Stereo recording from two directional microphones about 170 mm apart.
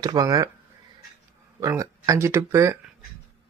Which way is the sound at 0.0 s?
25° right (ahead or behind).